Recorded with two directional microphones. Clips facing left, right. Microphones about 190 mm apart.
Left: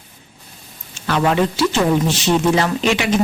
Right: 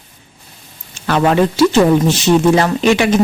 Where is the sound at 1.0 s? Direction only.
50° right (ahead or behind).